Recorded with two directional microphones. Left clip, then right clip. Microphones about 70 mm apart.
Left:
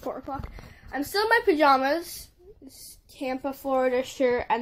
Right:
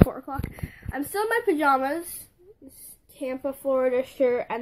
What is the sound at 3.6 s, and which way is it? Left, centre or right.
Speech, left.